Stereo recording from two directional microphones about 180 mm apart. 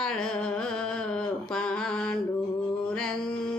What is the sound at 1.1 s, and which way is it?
Mantra, 5° left (ahead or behind).